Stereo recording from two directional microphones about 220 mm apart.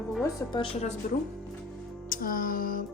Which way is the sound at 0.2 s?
15° left (ahead or behind).